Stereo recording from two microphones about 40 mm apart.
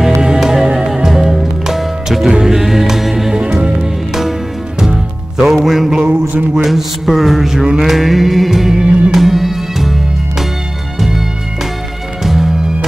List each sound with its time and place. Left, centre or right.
0.0 s music: centre
6.6 s a sound: centre
7.5 s music: centre
8.8 s music: right
9.1 s music: centre
11.0 s music: centre